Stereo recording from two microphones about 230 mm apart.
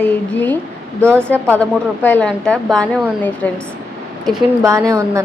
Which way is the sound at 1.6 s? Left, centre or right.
Centre.